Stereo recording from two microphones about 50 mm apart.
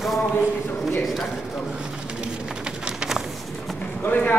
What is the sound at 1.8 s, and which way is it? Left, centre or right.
Pigeon, centre.